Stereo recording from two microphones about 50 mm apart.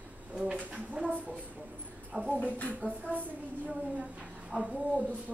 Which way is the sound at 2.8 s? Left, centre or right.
Left.